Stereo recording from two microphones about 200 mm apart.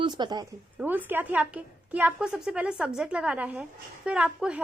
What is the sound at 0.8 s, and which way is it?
A woman's voice, 10° right (ahead or behind).